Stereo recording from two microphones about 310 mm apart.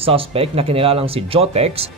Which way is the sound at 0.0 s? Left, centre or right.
Centre.